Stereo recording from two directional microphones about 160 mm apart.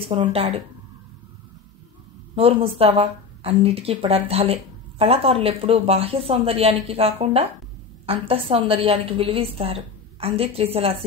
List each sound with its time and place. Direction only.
0.3 s a woman's voice: 35° right (ahead or behind)
2.3 s a woman's voice: 35° right (ahead or behind)